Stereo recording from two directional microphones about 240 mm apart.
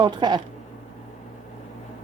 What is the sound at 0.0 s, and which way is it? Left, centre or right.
Speech, centre.